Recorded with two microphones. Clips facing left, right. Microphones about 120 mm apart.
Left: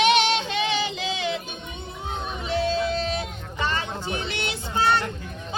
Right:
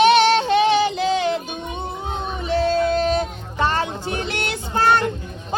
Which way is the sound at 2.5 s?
40° right (ahead or behind).